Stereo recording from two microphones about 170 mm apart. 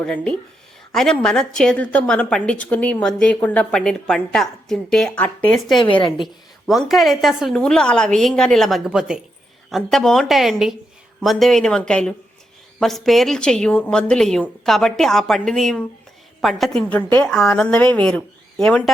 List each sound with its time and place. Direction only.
0.0 s a woman's voice: 5° left (ahead or behind)
5.8 s a woman's voice: 30° left (ahead or behind)
6.1 s a woman's voice: centre (ahead or behind)